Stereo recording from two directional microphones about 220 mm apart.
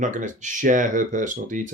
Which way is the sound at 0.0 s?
35° right (ahead or behind).